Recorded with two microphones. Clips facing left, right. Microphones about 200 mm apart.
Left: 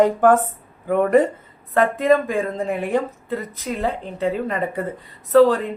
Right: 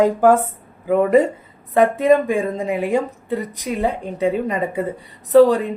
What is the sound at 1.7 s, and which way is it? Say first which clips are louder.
Speech: right 3 dB; 15° right (ahead or behind).